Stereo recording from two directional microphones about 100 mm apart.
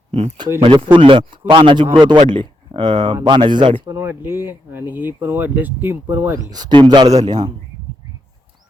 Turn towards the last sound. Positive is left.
turn(degrees=-40)  # may be behind; listen again after turning